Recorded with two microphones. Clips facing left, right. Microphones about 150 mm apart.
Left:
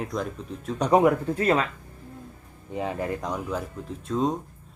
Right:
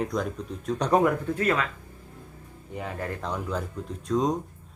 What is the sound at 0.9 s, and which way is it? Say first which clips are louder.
Speech: left 3 dB; 20° left (ahead or behind).